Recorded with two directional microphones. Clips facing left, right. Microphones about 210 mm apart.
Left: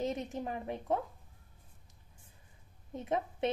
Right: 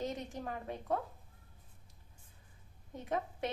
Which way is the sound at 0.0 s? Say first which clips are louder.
Left 4 dB; 25° left (ahead or behind).